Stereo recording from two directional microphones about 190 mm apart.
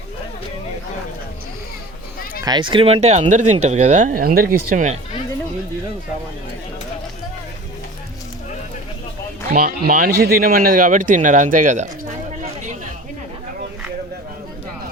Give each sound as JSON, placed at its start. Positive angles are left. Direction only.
{"t": 2.4, "sound": "speech", "side_deg": -25}
{"t": 9.5, "sound": "speech", "side_deg": -50}